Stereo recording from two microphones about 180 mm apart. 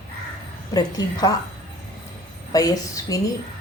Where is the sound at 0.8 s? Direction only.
20° left (ahead or behind).